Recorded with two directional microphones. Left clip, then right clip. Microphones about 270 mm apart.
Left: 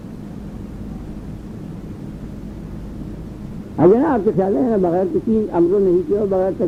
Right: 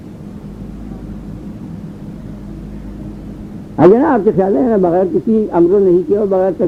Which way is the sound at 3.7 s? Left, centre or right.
Right.